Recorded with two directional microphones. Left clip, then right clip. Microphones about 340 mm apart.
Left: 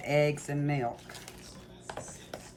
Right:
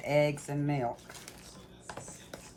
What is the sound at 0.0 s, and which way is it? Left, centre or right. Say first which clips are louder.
Speech: left 1 dB; centre.